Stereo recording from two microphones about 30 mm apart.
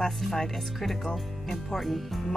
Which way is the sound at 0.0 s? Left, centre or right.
Centre.